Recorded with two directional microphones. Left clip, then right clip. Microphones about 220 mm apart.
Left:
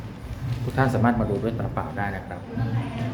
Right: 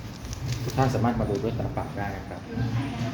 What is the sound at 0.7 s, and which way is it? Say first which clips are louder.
Speech: left 3 dB; 15° left (ahead or behind).